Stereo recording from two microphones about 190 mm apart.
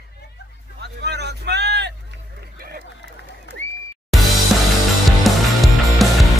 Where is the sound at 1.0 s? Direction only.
60° right (ahead or behind).